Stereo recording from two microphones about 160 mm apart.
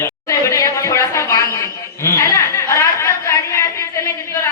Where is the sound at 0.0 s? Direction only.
20° left (ahead or behind).